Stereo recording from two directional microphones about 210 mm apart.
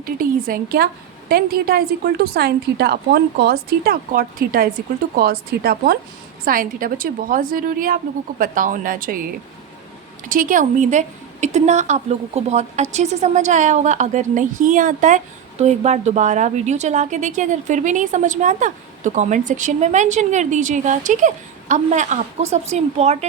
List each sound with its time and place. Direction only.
0.0 s a woman's voice: 40° right (ahead or behind)
10.2 s a woman's voice: 40° right (ahead or behind)